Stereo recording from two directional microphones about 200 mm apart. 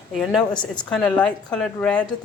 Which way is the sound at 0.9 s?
5° left (ahead or behind).